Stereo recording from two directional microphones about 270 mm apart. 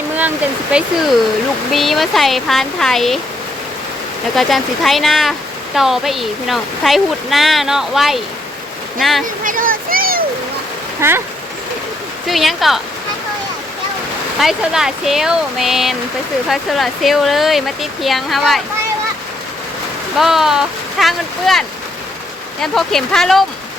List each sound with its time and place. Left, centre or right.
0.2 s speech: centre
4.4 s speech: centre
9.4 s a child's voice: right
11.0 s speech: centre
12.3 s speech: centre
14.3 s speech: centre
20.1 s speech: centre
22.6 s speech: centre